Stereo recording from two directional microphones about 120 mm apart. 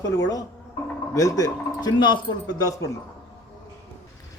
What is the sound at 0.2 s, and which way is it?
Speech, 30° left (ahead or behind).